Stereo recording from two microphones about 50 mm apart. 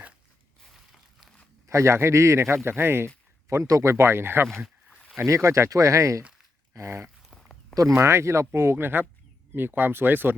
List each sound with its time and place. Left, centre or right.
1.6 s a man's voice: right
2.6 s speech: right
3.5 s speech: right
4.6 s a sound: centre
5.2 s speech: right
6.8 s speech: right
7.3 s a sound: centre
7.9 s speech: right